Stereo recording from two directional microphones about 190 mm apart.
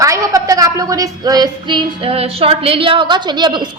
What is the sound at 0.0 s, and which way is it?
A woman's voice, 15° right (ahead or behind).